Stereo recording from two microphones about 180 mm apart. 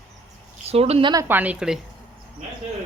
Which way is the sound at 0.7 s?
35° right (ahead or behind).